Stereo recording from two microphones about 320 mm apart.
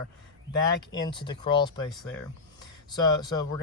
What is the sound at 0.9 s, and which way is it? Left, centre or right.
Speech, centre.